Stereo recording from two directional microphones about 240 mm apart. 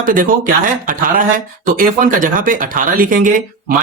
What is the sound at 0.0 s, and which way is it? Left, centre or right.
Speech, right.